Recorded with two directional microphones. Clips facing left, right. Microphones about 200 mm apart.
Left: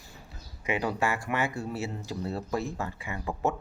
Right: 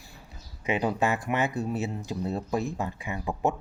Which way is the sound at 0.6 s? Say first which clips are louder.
Right 3 dB; 20° right (ahead or behind).